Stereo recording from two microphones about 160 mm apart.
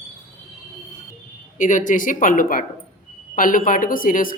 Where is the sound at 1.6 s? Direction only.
55° left (ahead or behind).